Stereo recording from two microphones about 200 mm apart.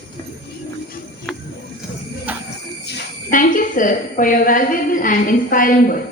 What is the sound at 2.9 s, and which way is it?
A woman's voice, 50° left (ahead or behind).